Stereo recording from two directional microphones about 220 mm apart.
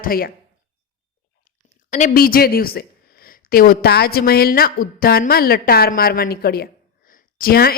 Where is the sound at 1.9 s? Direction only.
35° left (ahead or behind).